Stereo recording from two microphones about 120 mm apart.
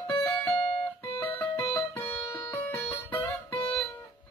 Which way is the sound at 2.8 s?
15° left (ahead or behind).